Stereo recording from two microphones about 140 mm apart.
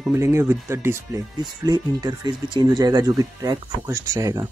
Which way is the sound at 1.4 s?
30° right (ahead or behind).